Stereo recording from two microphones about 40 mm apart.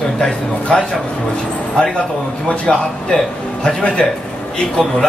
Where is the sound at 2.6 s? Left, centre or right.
Centre.